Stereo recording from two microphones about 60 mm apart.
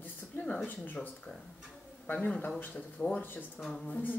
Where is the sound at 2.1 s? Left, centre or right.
Left.